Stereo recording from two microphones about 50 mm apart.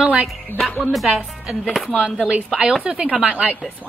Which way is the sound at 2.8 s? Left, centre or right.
Centre.